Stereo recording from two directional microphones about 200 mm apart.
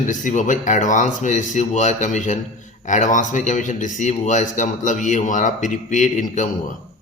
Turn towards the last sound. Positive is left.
turn(degrees=40)  # may be behind; listen again after turning